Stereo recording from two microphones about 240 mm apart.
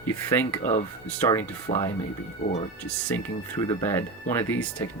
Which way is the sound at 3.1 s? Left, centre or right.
Centre.